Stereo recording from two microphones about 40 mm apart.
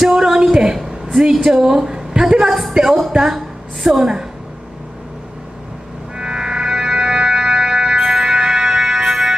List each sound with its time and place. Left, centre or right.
0.1 s a sound: centre
1.2 s a woman's voice: centre
3.3 s a woman's voice: centre
6.1 s music: centre